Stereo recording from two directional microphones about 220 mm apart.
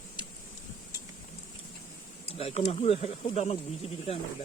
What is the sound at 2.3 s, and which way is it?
Speech, 25° left (ahead or behind).